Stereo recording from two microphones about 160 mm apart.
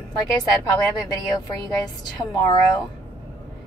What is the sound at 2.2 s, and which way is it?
Speech, 25° left (ahead or behind).